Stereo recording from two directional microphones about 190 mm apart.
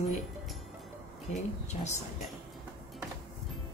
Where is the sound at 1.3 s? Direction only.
40° left (ahead or behind).